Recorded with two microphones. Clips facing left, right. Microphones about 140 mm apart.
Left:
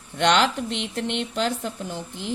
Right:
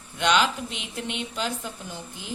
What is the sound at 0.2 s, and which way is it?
Speech, 75° left (ahead or behind).